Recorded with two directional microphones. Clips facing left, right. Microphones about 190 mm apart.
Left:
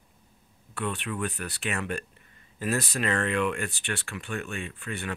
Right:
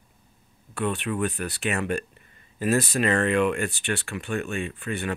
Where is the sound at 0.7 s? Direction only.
20° right (ahead or behind).